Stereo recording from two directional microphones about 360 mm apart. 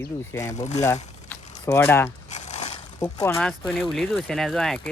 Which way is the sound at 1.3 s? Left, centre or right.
Centre.